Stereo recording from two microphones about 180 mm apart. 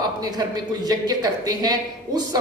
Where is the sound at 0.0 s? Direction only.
20° right (ahead or behind).